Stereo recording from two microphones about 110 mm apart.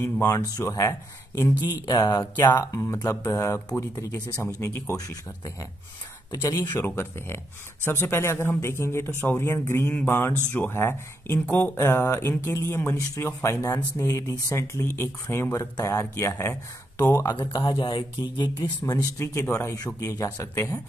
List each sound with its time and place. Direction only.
0.0 s speech: 25° left (ahead or behind)
6.5 s speech: 40° left (ahead or behind)
6.8 s speech: 20° left (ahead or behind)
17.4 s speech: 45° left (ahead or behind)
19.1 s speech: 25° left (ahead or behind)